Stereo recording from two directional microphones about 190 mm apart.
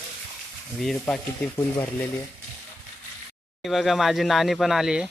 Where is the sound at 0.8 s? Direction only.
Centre (ahead or behind).